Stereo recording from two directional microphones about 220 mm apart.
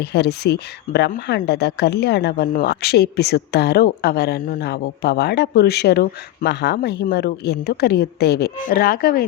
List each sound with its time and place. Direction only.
0.0 s speech: 50° left (ahead or behind)